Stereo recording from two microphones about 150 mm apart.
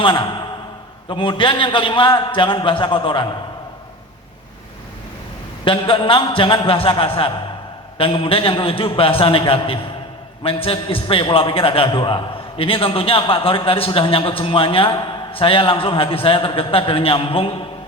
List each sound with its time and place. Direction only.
0.0 s a man's voice: 30° left (ahead or behind)
5.6 s a man's voice: 35° left (ahead or behind)